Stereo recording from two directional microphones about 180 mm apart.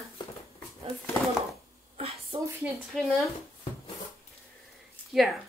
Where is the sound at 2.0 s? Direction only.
35° right (ahead or behind).